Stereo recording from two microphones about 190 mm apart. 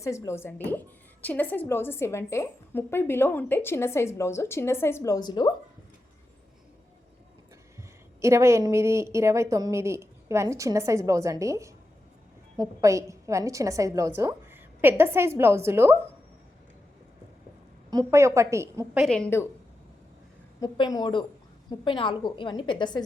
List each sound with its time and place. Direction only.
0.0 s a woman's voice: 15° left (ahead or behind)
8.2 s a woman's voice: 15° right (ahead or behind)
17.9 s a woman's voice: 15° right (ahead or behind)
19.0 s a woman's voice: 5° left (ahead or behind)
20.6 s a woman's voice: 20° left (ahead or behind)